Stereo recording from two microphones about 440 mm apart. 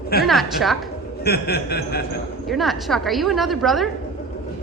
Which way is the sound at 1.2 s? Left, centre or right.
Left.